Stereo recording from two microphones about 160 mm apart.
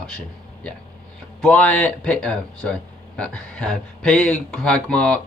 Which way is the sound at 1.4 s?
5° left (ahead or behind).